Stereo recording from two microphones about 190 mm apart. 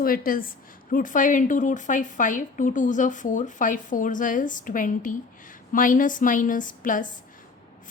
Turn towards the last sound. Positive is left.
turn(degrees=45)  # may be behind; listen again after turning